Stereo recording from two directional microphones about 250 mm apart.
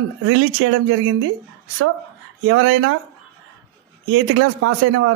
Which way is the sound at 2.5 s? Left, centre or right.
Right.